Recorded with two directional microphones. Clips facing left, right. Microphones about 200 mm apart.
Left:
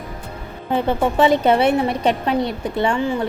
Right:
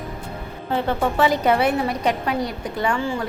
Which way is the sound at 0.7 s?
20° left (ahead or behind).